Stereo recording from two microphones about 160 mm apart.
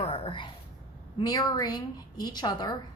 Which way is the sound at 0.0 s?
35° left (ahead or behind).